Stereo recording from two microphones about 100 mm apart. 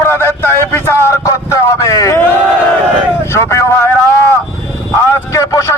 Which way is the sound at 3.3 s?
25° left (ahead or behind).